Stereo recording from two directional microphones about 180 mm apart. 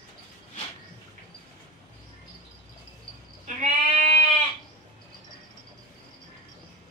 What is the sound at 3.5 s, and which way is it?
Bleat, 45° right (ahead or behind).